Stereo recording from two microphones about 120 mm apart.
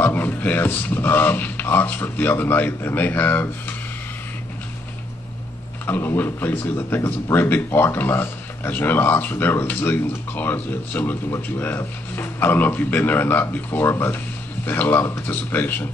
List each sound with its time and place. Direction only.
0.0 s speech: 15° left (ahead or behind)
5.9 s speech: 15° left (ahead or behind)